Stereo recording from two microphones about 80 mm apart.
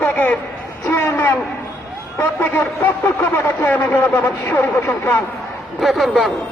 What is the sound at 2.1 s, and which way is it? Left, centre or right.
A man's voice, left.